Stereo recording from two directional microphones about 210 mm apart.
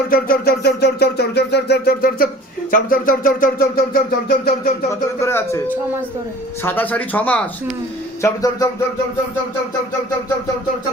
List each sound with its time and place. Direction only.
0.1 s a sound: 45° left (ahead or behind)
5.2 s speech: 10° left (ahead or behind)
6.6 s speech: 10° left (ahead or behind)